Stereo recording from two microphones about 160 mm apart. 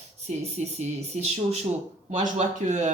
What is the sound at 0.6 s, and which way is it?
Speech, 45° right (ahead or behind).